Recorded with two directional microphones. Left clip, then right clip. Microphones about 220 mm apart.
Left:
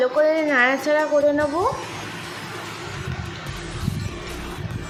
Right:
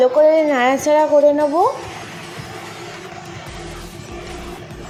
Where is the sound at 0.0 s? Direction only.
15° right (ahead or behind).